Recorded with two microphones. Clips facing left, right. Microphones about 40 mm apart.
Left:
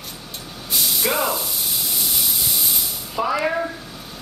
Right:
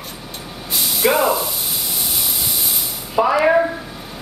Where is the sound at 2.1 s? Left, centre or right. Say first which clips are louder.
Right 1 dB; centre.